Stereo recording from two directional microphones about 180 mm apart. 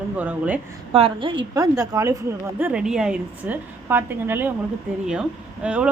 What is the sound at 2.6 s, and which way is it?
A woman's voice, 5° right (ahead or behind).